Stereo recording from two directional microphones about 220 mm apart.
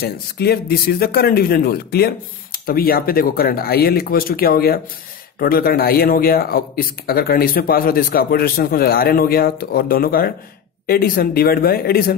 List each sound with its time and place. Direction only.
0.0 s speech: 45° left (ahead or behind)